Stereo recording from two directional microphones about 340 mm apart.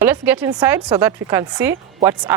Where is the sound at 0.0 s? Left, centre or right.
Centre.